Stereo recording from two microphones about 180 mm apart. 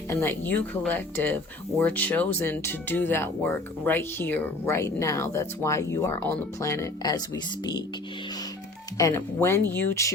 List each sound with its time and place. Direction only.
0.1 s speech: 15° left (ahead or behind)
9.0 s speech: 15° left (ahead or behind)